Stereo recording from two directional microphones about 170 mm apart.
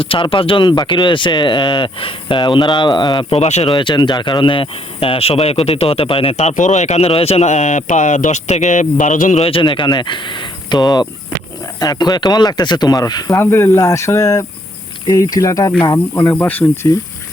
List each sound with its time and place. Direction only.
0.0 s speech: 30° left (ahead or behind); by 9.4 s 50° left (ahead or behind)
9.4 s speech: 30° left (ahead or behind); by 16.9 s 10° left (ahead or behind)